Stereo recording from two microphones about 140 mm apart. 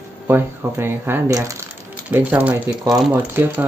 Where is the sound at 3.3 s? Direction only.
15° right (ahead or behind).